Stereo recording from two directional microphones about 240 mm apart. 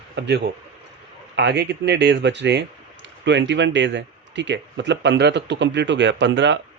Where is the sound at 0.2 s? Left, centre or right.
Right.